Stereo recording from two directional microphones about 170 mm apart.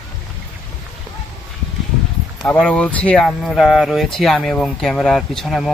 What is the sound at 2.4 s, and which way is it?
Speech, 5° left (ahead or behind).